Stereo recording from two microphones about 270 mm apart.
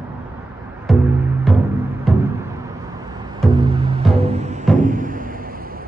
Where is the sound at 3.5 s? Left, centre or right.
Centre.